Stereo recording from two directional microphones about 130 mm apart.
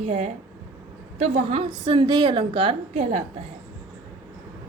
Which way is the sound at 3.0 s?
60° right (ahead or behind).